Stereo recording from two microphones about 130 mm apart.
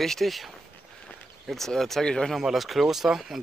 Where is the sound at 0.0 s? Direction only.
Centre (ahead or behind).